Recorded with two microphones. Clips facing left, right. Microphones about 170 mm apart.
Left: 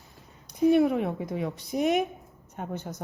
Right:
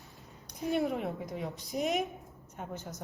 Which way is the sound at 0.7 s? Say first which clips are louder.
Left 9 dB; 70° left (ahead or behind).